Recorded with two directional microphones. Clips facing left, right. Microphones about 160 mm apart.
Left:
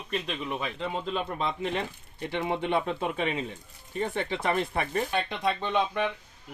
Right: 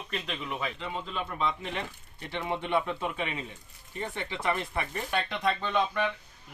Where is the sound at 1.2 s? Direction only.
30° left (ahead or behind).